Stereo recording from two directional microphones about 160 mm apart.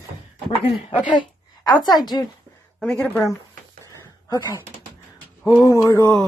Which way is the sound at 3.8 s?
20° right (ahead or behind).